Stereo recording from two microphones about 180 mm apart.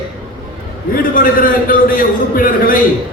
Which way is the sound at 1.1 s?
50° left (ahead or behind).